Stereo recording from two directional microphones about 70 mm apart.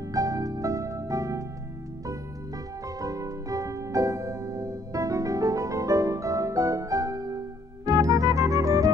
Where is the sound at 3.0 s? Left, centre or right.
Right.